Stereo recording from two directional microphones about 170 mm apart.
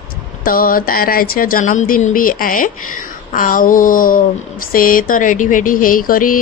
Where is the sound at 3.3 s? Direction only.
50° left (ahead or behind).